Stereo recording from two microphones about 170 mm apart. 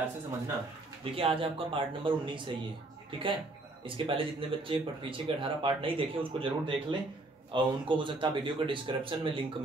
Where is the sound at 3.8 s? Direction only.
30° right (ahead or behind).